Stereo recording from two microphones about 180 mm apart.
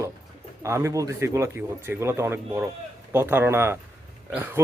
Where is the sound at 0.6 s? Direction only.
15° right (ahead or behind).